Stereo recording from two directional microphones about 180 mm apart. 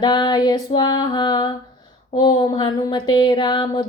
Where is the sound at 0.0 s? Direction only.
25° left (ahead or behind).